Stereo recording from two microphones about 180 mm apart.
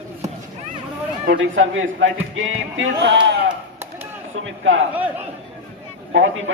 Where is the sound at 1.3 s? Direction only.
90° right.